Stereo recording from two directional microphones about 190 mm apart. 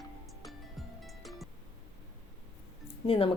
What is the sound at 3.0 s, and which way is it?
Speech, 30° left (ahead or behind).